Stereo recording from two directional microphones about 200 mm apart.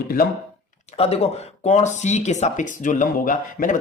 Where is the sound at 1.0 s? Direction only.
30° left (ahead or behind).